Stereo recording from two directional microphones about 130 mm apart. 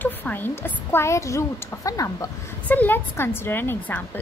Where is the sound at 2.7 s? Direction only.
15° left (ahead or behind).